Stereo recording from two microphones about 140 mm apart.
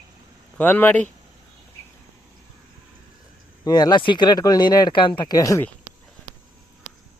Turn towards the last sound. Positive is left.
turn(degrees=25)  # may be behind; listen again after turning